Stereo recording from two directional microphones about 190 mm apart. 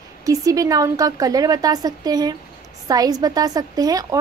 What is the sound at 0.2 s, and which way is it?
A woman's voice, 20° right (ahead or behind).